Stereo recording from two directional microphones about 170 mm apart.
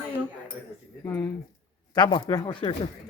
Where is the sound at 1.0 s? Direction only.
10° left (ahead or behind).